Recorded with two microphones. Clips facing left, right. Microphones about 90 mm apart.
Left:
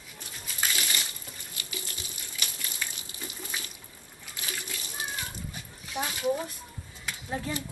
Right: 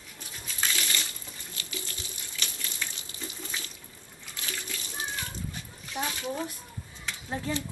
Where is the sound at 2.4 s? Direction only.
15° left (ahead or behind).